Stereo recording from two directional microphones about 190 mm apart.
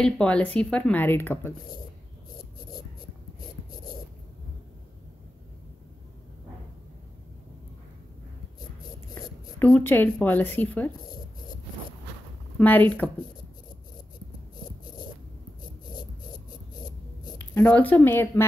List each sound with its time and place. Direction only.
0.0 s speech: 5° left (ahead or behind)
9.1 s a sound: 20° left (ahead or behind)
9.7 s speech: 10° left (ahead or behind)
12.5 s speech: 10° left (ahead or behind)
17.6 s speech: 10° left (ahead or behind)